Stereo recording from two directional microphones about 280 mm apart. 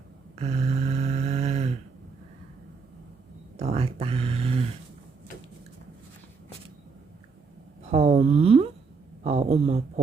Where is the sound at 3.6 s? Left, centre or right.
Right.